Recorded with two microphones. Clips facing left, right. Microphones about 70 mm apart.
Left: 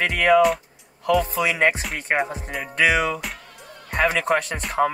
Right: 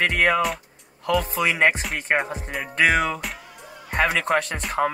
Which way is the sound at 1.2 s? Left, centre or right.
Right.